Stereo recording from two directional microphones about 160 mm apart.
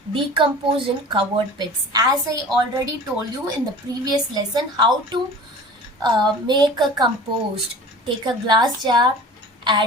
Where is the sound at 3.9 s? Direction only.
25° right (ahead or behind).